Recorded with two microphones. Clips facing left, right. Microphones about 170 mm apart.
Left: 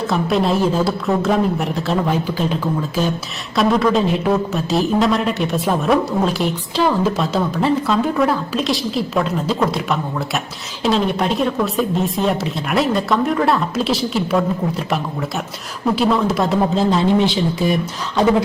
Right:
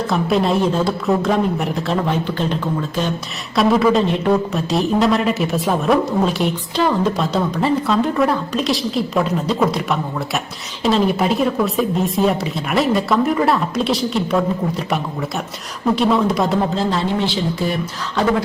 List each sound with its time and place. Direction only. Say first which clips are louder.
0.1 s speech: even; centre (ahead or behind)
16.7 s a man's voice: left 4 dB; 15° left (ahead or behind)